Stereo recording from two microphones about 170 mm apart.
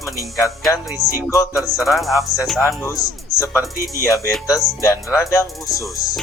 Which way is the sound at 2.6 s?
20° left (ahead or behind).